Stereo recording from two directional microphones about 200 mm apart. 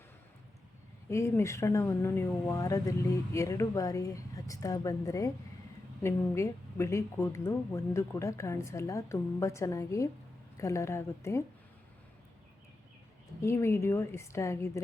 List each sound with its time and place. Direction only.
1.1 s a woman's voice: 15° left (ahead or behind)
13.4 s a woman's voice: 15° left (ahead or behind)